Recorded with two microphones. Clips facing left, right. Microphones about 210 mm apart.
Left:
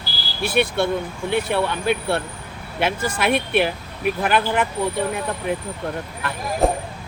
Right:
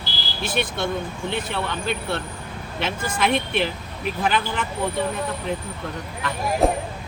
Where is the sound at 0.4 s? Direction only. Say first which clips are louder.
Left 5 dB; 10° left (ahead or behind).